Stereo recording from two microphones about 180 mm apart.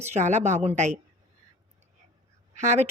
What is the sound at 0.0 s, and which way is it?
Speech, 40° right (ahead or behind).